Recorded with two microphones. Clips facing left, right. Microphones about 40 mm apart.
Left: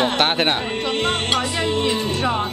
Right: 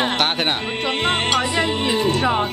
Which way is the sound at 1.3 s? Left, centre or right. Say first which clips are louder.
Right 1 dB; centre.